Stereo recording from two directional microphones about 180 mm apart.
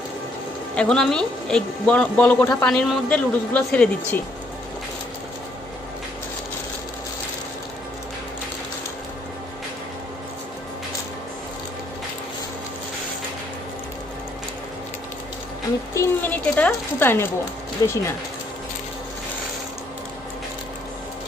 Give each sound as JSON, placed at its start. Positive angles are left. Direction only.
{"t": 0.8, "sound": "speech", "side_deg": 5}
{"t": 16.0, "sound": "a sound", "side_deg": 10}
{"t": 17.8, "sound": "speech", "side_deg": 15}